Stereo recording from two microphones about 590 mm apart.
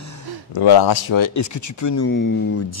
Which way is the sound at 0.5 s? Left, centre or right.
Left.